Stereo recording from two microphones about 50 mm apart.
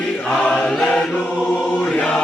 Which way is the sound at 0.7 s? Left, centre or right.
Centre.